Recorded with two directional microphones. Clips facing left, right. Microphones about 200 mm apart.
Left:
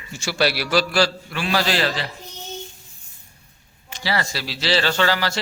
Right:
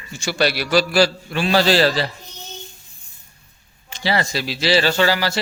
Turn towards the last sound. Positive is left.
turn(degrees=-10)  # may be behind; listen again after turning